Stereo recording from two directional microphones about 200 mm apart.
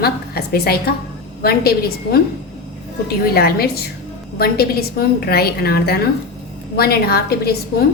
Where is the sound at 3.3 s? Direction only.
50° left (ahead or behind).